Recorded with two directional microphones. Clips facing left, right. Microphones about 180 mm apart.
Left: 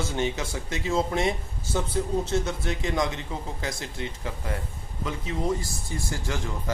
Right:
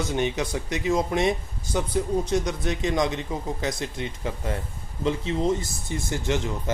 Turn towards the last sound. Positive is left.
turn(degrees=-20)  # may be behind; listen again after turning